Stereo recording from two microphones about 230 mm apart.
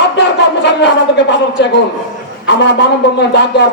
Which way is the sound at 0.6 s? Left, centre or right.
Left.